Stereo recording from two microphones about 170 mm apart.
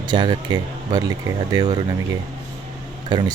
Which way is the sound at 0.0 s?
25° right (ahead or behind).